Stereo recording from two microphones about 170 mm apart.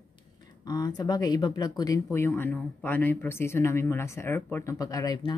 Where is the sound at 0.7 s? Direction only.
20° left (ahead or behind).